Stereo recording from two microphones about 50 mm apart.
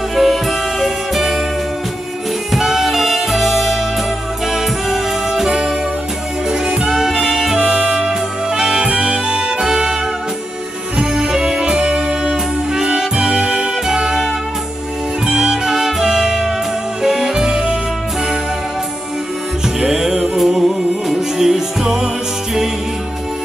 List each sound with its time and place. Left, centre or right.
0.1 s music: centre
2.5 s music: centre
11.0 s music: centre
19.8 s music: centre